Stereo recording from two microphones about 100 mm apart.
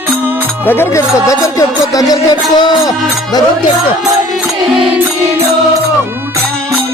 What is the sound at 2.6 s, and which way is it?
Music, 45° left (ahead or behind).